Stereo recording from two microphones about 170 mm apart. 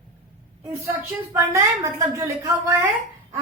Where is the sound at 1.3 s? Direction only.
15° right (ahead or behind).